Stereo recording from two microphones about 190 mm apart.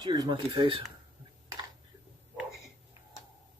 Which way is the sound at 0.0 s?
20° right (ahead or behind).